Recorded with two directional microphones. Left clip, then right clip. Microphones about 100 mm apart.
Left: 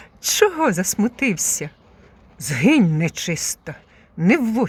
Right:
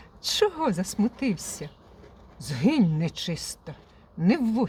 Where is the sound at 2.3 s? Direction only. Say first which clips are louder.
Left 8 dB; 50° left (ahead or behind).